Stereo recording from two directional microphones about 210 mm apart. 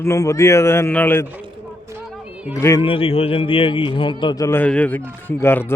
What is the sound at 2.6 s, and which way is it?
Speech, 15° left (ahead or behind).